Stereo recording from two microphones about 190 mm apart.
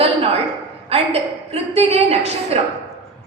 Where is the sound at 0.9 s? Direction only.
30° right (ahead or behind).